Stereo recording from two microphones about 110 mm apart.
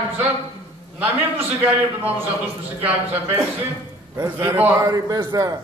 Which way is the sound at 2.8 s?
20° right (ahead or behind).